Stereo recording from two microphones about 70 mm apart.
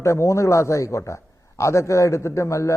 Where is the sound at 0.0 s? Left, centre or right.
Left.